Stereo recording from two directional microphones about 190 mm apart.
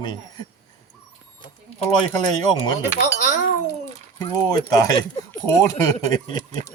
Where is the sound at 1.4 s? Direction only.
30° left (ahead or behind).